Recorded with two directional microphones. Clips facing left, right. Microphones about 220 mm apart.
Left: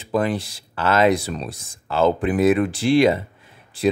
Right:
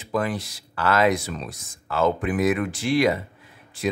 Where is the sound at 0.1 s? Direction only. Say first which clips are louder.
Left 4 dB; 25° left (ahead or behind).